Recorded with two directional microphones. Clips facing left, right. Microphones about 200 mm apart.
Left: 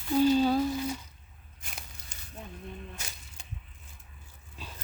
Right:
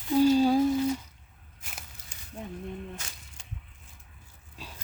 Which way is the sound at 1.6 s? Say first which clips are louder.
Left 1 dB; 5° right (ahead or behind).